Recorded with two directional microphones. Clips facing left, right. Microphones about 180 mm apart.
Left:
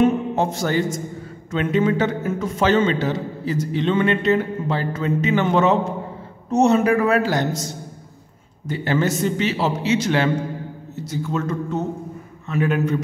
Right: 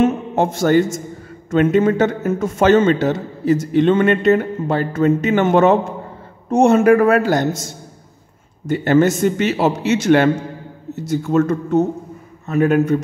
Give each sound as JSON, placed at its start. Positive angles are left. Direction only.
{"t": 0.0, "sound": "a man's voice", "side_deg": -50}